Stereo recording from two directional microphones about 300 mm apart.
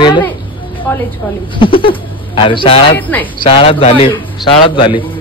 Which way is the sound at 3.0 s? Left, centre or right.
Centre.